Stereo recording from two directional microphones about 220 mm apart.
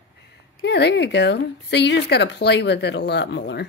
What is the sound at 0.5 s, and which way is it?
Speech, 50° left (ahead or behind).